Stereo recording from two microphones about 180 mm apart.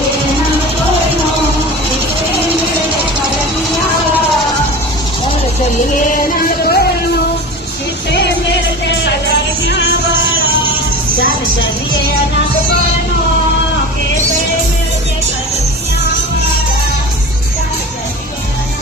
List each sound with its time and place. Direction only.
6.1 s music: 55° left (ahead or behind)
8.1 s music: 70° left (ahead or behind)